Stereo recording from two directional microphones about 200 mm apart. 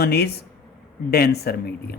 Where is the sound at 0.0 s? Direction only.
50° left (ahead or behind).